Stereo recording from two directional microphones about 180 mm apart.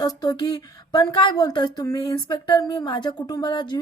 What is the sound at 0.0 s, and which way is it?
Speech, 20° left (ahead or behind).